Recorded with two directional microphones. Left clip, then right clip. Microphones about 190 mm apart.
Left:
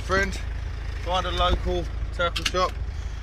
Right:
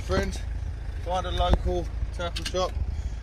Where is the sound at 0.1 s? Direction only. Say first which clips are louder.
Left 5 dB; 20° right (ahead or behind).